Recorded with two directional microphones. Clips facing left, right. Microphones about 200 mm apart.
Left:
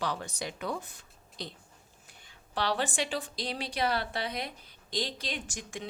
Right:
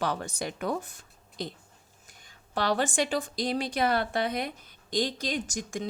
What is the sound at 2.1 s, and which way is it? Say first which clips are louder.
A woman's voice: right 4 dB; 45° right (ahead or behind).